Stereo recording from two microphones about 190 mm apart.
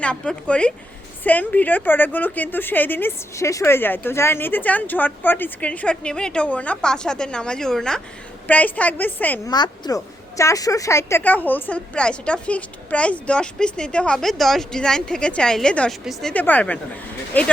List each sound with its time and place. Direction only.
0.0 s a woman's voice: 5° left (ahead or behind)
9.5 s a woman's voice: 20° left (ahead or behind)